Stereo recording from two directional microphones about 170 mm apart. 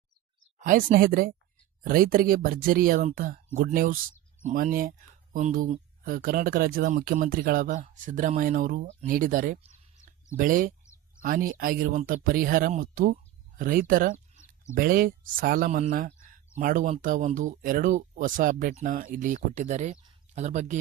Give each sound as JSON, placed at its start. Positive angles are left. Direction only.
{"t": 0.6, "sound": "speech", "side_deg": -50}